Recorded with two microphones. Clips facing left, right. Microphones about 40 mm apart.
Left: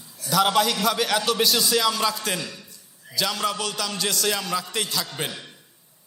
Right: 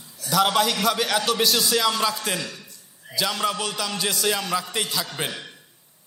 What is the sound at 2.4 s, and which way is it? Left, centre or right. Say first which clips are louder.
Speech: right 1 dB; right.